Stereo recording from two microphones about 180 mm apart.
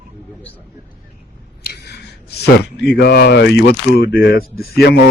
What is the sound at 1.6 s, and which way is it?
Speech, 65° left (ahead or behind).